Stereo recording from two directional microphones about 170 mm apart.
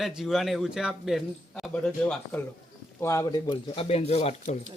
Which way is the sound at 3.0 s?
15° left (ahead or behind).